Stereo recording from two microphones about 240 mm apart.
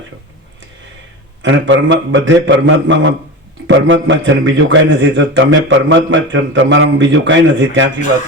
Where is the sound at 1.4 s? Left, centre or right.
Right.